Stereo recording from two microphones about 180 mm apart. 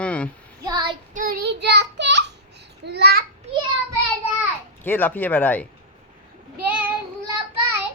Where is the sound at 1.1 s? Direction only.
50° right (ahead or behind).